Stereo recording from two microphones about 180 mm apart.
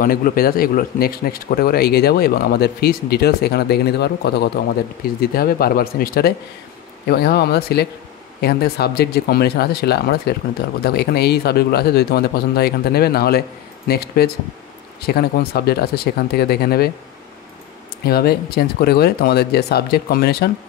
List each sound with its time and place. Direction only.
0.0 s speech: 50° left (ahead or behind)
18.0 s speech: 60° left (ahead or behind)